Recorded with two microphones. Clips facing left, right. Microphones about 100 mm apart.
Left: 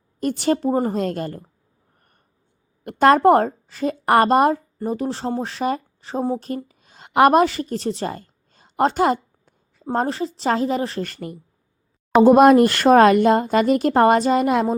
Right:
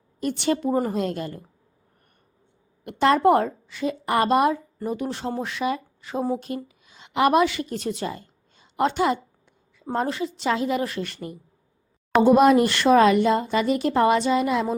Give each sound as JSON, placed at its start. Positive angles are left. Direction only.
{"t": 0.2, "sound": "speech", "side_deg": 40}
{"t": 2.8, "sound": "a woman's voice", "side_deg": 45}
{"t": 8.1, "sound": "a sound", "side_deg": 45}
{"t": 9.8, "sound": "speech", "side_deg": 35}
{"t": 12.2, "sound": "speech", "side_deg": 50}